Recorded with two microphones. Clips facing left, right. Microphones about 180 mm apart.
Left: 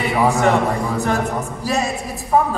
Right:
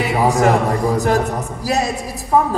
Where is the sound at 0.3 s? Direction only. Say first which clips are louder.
Right 2 dB; 40° right (ahead or behind).